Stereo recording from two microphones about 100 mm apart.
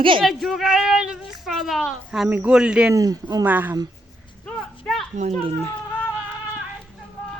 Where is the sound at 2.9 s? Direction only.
35° right (ahead or behind).